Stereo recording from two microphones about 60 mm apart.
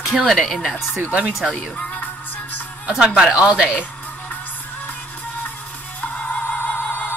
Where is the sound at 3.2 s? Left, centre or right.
Centre.